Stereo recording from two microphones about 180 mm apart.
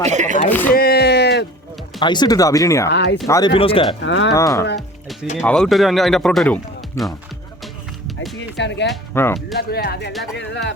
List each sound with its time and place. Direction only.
0.0 s speech: 40° right (ahead or behind)
0.7 s a sound: 60° left (ahead or behind)
2.0 s speech: 25° left (ahead or behind)
2.9 s speech: 80° left
3.2 s speech: 15° left (ahead or behind)
3.5 s speech: 30° left (ahead or behind)
4.0 s speech: 85° left
4.4 s speech: 15° left (ahead or behind)
5.4 s speech: centre (ahead or behind)
7.6 s music: centre (ahead or behind)
8.5 s speech: 75° left (ahead or behind)
9.1 s speech: 15° left (ahead or behind)
9.6 s speech: 60° left (ahead or behind)
10.3 s speech: 75° left (ahead or behind)